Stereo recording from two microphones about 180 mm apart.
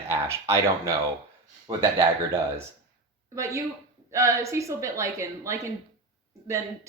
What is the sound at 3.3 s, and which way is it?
Speech, 15° right (ahead or behind).